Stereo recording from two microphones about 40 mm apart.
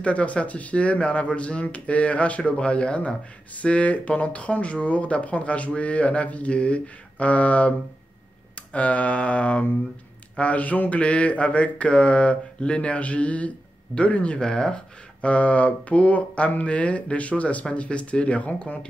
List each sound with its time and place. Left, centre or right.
0.0 s speech: left
14.4 s speech: centre
15.2 s speech: left